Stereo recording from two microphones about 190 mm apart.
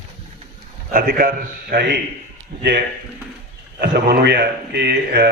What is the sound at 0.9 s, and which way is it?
A man's voice, 50° right (ahead or behind).